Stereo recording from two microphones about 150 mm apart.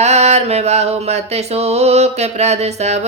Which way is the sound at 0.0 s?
45° right (ahead or behind).